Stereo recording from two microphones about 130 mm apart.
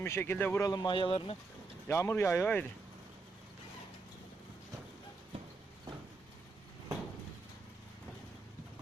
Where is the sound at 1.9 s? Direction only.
20° left (ahead or behind).